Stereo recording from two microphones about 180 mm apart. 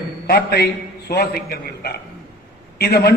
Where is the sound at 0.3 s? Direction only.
65° left (ahead or behind).